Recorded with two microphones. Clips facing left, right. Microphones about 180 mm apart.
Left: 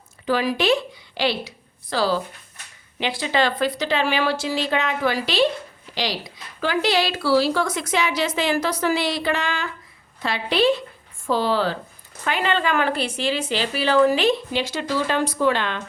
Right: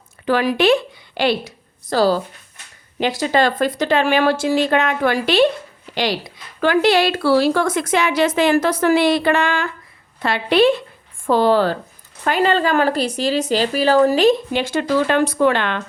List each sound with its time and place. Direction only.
0.3 s a woman's voice: 60° right (ahead or behind)